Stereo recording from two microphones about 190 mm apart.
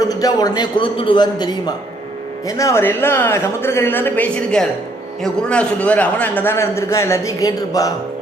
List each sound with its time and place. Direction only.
0.1 s a man's voice: 20° left (ahead or behind)